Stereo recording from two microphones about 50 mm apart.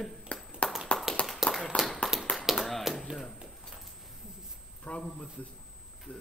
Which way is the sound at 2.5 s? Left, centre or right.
Centre.